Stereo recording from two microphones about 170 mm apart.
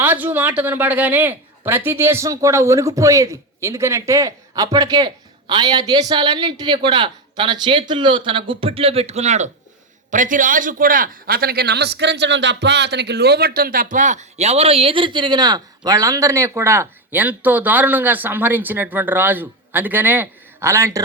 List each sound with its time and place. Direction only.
0.0 s a man's voice: 10° right (ahead or behind)